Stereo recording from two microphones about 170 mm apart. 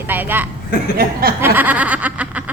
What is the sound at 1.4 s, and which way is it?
A woman's voice, 10° right (ahead or behind).